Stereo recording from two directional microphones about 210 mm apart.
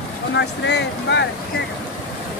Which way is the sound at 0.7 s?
55° left (ahead or behind).